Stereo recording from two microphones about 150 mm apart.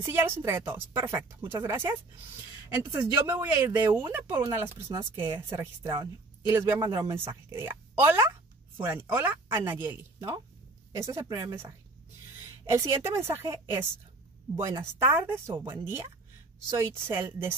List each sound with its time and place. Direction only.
0.0 s speech: 15° right (ahead or behind)
6.5 s speech: 15° right (ahead or behind)